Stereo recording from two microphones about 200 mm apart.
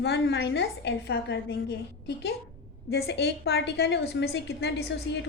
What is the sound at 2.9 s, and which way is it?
A woman's voice, 55° left (ahead or behind).